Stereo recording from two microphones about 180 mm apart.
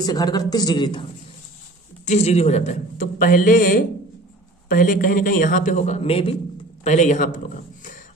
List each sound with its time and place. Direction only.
0.0 s a man's voice: 20° left (ahead or behind)
2.0 s a man's voice: 35° left (ahead or behind)